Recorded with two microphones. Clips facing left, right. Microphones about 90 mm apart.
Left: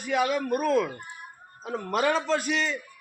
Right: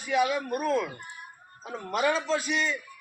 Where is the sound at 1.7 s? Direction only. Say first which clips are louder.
Left 2 dB; 45° left (ahead or behind).